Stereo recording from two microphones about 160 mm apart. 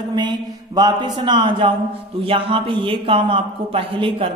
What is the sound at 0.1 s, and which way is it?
A man's voice, 25° right (ahead or behind).